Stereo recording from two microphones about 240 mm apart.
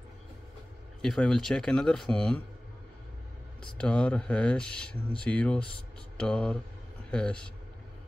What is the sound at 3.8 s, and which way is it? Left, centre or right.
Speech, centre.